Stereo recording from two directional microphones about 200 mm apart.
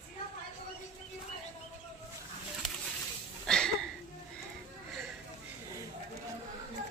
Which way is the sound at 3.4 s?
5° left (ahead or behind).